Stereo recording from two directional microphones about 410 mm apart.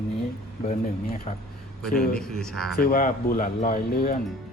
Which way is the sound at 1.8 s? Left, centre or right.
Centre.